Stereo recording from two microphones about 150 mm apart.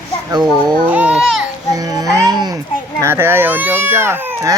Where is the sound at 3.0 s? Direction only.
15° right (ahead or behind).